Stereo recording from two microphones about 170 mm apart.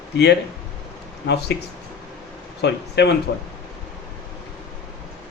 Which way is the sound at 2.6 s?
85° left.